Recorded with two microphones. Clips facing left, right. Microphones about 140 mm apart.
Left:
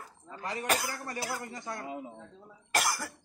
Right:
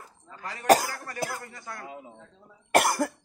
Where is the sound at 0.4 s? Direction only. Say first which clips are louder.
Right 10 dB; 20° left (ahead or behind).